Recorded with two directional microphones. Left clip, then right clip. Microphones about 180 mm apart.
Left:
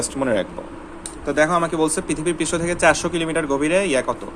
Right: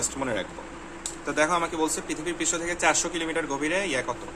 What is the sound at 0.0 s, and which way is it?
Speech, 25° left (ahead or behind).